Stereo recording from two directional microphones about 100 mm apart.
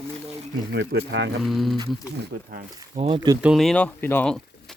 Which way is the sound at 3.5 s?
5° left (ahead or behind).